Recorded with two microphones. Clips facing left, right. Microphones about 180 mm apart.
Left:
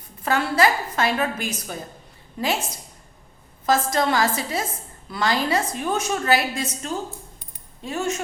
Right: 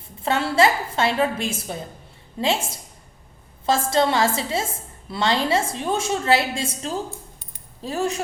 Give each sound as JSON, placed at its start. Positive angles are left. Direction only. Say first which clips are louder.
{"t": 0.2, "sound": "a woman's voice", "louder": "right 1 dB", "side_deg": -25}